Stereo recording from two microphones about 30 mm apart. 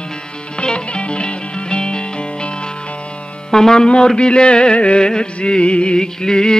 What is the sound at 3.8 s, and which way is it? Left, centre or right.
Music, left.